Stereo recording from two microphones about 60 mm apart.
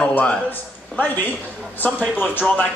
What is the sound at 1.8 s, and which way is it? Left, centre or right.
Speech, left.